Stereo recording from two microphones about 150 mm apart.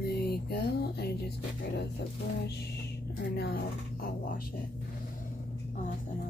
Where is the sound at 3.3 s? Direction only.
85° left.